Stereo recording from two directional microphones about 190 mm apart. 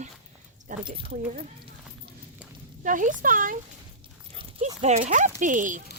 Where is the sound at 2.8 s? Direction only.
45° right (ahead or behind).